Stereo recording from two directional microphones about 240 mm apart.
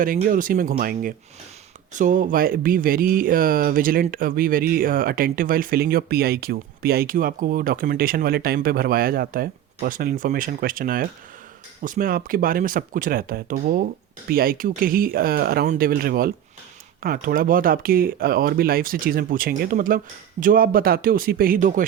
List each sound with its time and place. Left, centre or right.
0.0 s speech: right